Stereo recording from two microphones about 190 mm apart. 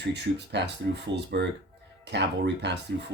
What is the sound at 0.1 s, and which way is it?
Speech, 65° right (ahead or behind).